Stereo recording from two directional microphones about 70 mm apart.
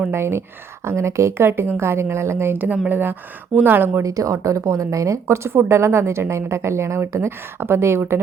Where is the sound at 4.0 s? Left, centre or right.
Right.